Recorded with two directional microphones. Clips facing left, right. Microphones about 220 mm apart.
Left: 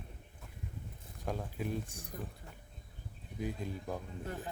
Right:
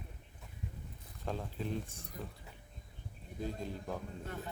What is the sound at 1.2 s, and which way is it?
Speech, 10° left (ahead or behind).